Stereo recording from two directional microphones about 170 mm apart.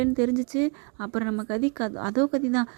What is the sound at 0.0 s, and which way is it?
Speech, 20° right (ahead or behind).